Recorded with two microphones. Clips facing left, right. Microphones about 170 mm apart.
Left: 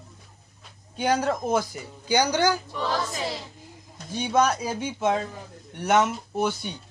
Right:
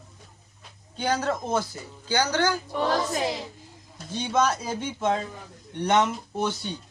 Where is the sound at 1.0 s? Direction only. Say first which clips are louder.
Left 2 dB; 10° left (ahead or behind).